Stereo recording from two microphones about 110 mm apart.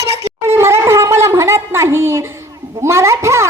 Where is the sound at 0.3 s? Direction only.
25° right (ahead or behind).